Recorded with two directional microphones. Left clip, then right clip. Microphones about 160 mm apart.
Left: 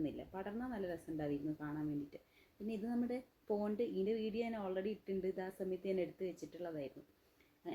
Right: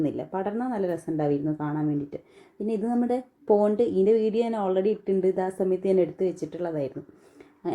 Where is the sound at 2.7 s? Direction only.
20° right (ahead or behind).